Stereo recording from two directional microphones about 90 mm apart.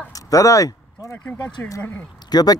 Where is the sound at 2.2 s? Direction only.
50° left (ahead or behind).